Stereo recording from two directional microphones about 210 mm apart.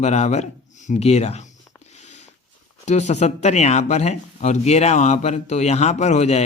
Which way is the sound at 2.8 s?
35° left (ahead or behind).